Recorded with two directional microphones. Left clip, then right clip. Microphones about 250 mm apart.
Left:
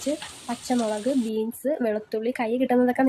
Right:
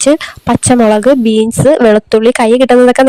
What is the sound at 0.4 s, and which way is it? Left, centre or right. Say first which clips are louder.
A woman's voice: right 18 dB; right.